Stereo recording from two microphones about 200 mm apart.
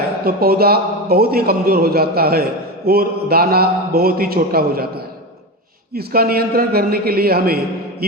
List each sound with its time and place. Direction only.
0.3 s a man's voice: 50° right (ahead or behind)
5.9 s a man's voice: 50° right (ahead or behind)